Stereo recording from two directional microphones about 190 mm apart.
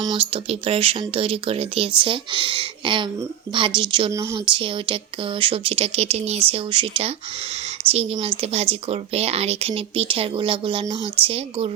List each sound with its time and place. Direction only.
0.0 s speech: 25° right (ahead or behind)
4.5 s speech: 25° right (ahead or behind)